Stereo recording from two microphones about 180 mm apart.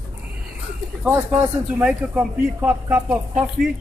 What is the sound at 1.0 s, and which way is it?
A man's voice, 10° right (ahead or behind).